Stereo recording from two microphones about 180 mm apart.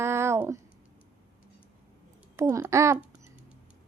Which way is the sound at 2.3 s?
15° right (ahead or behind).